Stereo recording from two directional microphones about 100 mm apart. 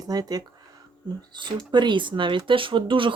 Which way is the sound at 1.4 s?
50° right (ahead or behind).